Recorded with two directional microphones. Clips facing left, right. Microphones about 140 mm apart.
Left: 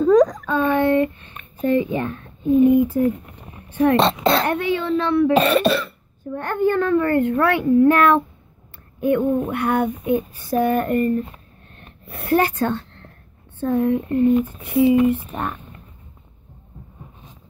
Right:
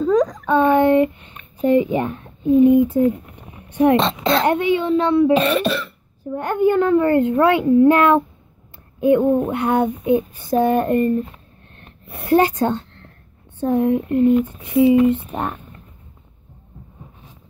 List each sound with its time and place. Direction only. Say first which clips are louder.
0.0 s a sound: left 3 dB; 50° left (ahead or behind)
0.5 s a sound: right 4 dB; 20° right (ahead or behind)
1.6 s a child's voice: right 3 dB; 20° right (ahead or behind)
5.3 s cough: left 1 dB; 40° left (ahead or behind)
6.3 s a child's voice: right 3 dB; 15° right (ahead or behind)
9.5 s speech: right 2 dB; 25° right (ahead or behind)
12.1 s speech: right 3 dB; 20° right (ahead or behind)